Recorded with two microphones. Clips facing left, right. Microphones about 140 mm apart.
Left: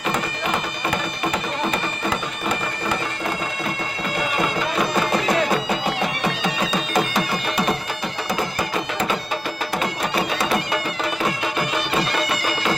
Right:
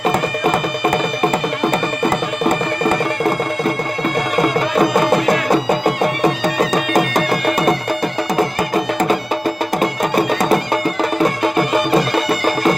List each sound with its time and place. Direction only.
0.0 s music: 40° right (ahead or behind)
2.4 s music: 60° right (ahead or behind)
4.7 s music: 50° right (ahead or behind)
8.7 s music: 45° right (ahead or behind)
11.2 s music: 50° right (ahead or behind)